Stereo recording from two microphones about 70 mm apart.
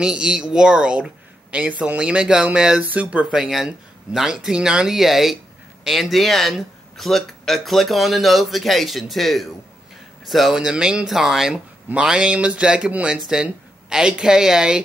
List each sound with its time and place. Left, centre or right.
0.0 s speech: centre
3.3 s speech: centre